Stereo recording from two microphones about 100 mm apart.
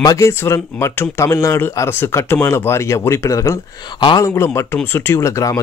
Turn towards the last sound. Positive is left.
turn(degrees=30)  # may be behind; listen again after turning